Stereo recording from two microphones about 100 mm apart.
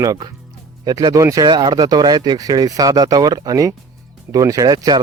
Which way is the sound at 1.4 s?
45° right (ahead or behind).